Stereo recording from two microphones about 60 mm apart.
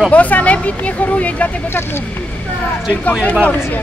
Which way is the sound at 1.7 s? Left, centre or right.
Left.